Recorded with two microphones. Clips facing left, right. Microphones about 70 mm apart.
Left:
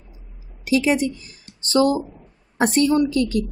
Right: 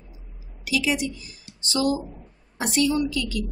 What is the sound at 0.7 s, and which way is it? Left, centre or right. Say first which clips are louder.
A woman's voice: left 6 dB; left.